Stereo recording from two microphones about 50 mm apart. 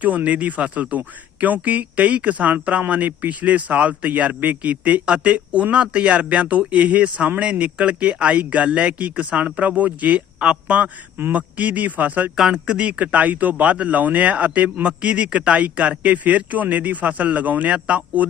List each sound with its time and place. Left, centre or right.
0.0 s a man's voice: right
12.4 s a man's voice: centre